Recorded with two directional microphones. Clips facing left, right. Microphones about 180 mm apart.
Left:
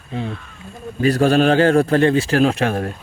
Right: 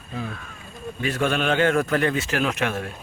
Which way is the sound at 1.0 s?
35° left (ahead or behind).